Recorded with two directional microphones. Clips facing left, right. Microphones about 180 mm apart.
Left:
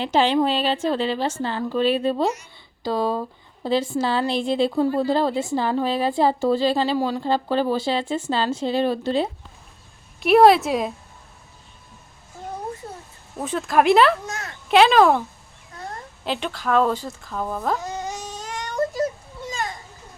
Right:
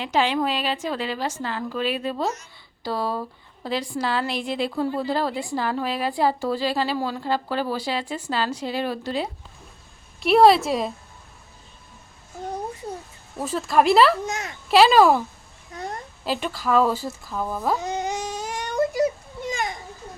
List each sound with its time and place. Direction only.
0.0 s a woman's voice: 30° left (ahead or behind)
2.3 s a woman's voice: 15° left (ahead or behind)
10.2 s speech: centre (ahead or behind)
13.4 s speech: centre (ahead or behind)
14.3 s a child's voice: 20° right (ahead or behind)
14.7 s speech: 5° right (ahead or behind)
16.2 s speech: 5° right (ahead or behind)
17.7 s baby cry: 15° right (ahead or behind)